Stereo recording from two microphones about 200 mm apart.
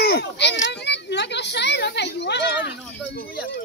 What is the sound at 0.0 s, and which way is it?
Children playing, 55° left (ahead or behind).